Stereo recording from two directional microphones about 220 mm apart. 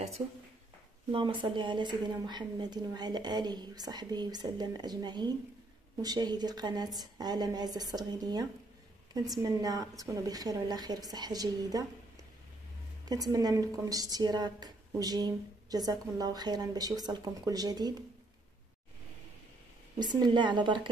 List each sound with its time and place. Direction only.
1.1 s a woman's voice: 20° right (ahead or behind)
13.1 s a woman's voice: 15° right (ahead or behind)
20.0 s a woman's voice: 20° right (ahead or behind)